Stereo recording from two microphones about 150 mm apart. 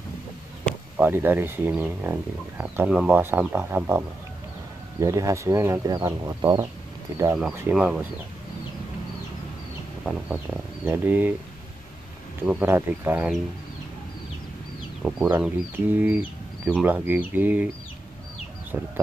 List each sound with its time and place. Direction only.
0.9 s speech: 10° right (ahead or behind)
5.0 s speech: 20° right (ahead or behind)
7.7 s speech: 5° right (ahead or behind)
10.0 s speech: 10° right (ahead or behind)
12.4 s speech: 10° right (ahead or behind)
15.0 s speech: 5° right (ahead or behind)